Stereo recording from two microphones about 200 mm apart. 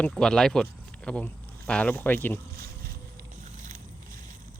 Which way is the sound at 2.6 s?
50° right (ahead or behind).